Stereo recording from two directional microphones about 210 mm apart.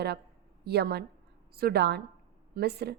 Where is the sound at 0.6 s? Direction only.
50° right (ahead or behind).